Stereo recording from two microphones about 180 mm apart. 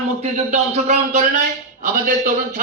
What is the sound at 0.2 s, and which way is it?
Speech, 40° right (ahead or behind).